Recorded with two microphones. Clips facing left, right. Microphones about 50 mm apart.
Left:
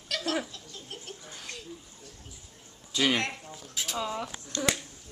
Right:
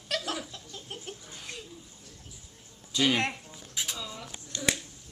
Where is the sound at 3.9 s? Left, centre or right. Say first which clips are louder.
Left 8 dB; left.